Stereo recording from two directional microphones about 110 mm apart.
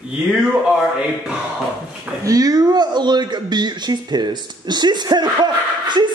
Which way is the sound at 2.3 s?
35° right (ahead or behind).